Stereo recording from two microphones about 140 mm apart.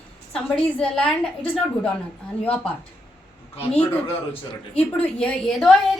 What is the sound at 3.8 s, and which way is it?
Speech, 40° left (ahead or behind).